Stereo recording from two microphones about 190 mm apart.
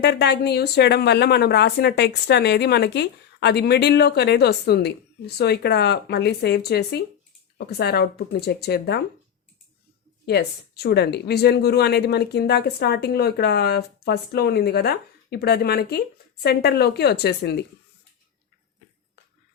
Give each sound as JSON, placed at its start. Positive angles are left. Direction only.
{"t": 0.0, "sound": "speech", "side_deg": 65}
{"t": 10.2, "sound": "speech", "side_deg": 60}